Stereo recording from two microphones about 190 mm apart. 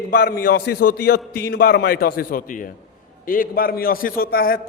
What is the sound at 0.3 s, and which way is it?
A man's voice, 50° left (ahead or behind).